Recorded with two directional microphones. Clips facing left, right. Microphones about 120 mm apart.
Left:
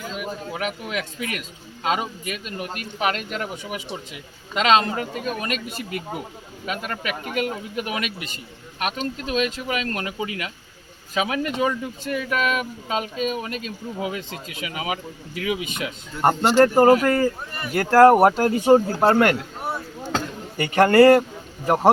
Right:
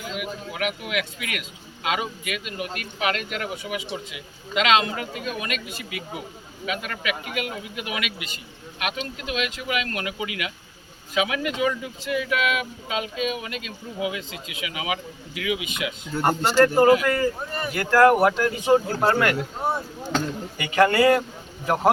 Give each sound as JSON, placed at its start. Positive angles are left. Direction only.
{"t": 0.1, "sound": "a man's voice", "side_deg": 35}
{"t": 20.6, "sound": "speech", "side_deg": 45}